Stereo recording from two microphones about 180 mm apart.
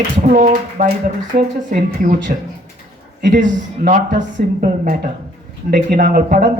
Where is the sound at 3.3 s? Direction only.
45° right (ahead or behind).